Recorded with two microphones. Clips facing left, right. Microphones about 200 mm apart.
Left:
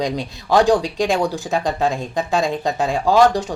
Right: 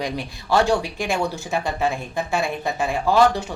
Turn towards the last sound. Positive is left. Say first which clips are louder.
# left 3 dB
turn(degrees=15)  # may be behind; listen again after turning